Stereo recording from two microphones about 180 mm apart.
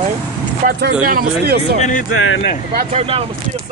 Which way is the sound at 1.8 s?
45° left (ahead or behind).